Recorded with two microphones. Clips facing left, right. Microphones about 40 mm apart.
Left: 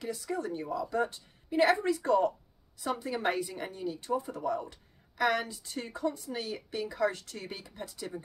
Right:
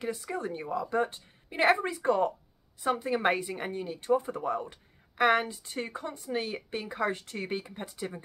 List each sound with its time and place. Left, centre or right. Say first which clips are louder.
0.0 s speech: right 1 dB; right